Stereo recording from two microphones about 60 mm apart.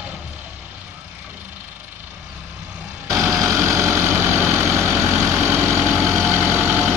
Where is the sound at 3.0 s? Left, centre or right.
Right.